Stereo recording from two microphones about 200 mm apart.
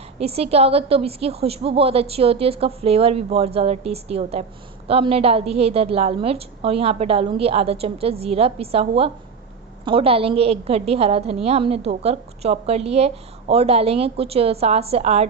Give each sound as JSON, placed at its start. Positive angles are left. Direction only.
{"t": 0.2, "sound": "a woman's voice", "side_deg": -30}